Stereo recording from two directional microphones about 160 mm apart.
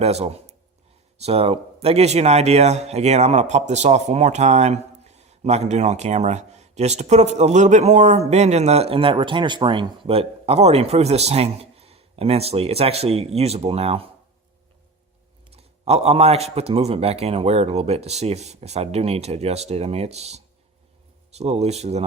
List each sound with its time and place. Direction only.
0.0 s a man's voice: 40° right (ahead or behind)
15.4 s a man's voice: 40° right (ahead or behind)